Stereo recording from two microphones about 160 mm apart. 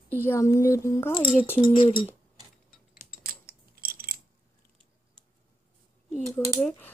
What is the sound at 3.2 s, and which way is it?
Mechanisms, 70° right (ahead or behind).